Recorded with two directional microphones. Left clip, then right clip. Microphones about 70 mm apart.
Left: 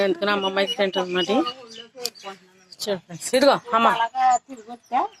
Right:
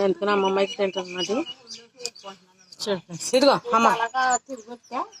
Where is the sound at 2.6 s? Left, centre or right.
Right.